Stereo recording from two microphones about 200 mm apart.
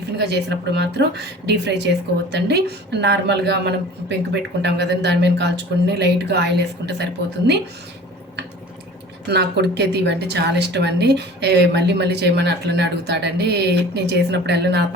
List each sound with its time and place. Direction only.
0.2 s a woman's voice: 55° right (ahead or behind)
9.2 s a woman's voice: 55° right (ahead or behind)